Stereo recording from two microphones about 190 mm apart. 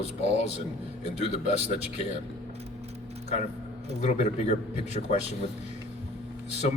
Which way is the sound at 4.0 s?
35° left (ahead or behind).